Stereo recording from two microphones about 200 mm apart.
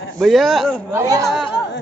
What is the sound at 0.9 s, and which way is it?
Speech, 15° right (ahead or behind).